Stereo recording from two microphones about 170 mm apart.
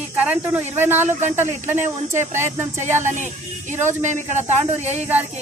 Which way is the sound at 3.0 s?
45° right (ahead or behind).